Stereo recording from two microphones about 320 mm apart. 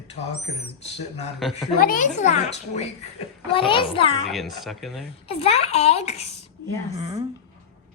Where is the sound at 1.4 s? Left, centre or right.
Centre.